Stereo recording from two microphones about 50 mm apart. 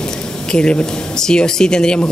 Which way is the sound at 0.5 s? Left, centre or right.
Centre.